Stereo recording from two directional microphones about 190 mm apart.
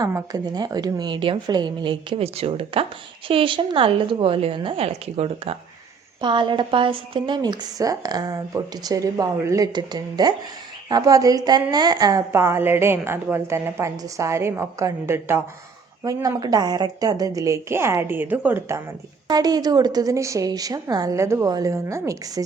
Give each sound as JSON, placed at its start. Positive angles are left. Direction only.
{"t": 0.0, "sound": "a woman's voice", "side_deg": -20}
{"t": 19.3, "sound": "a woman's voice", "side_deg": -20}